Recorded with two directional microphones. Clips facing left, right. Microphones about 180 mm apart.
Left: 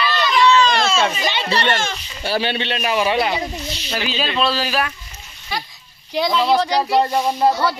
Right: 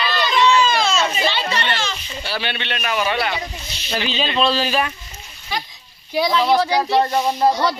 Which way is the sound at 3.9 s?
5° left (ahead or behind).